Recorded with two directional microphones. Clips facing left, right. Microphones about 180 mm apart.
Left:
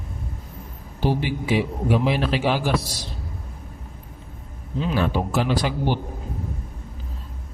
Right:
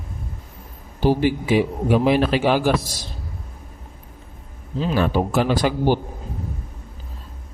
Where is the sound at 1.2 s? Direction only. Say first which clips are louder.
Right 5 dB; 45° right (ahead or behind).